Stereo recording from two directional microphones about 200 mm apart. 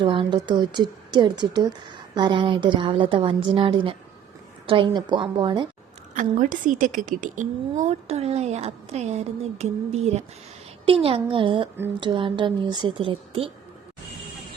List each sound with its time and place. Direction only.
0.0 s a woman's voice: 25° right (ahead or behind)
6.1 s a woman's voice: 40° right (ahead or behind)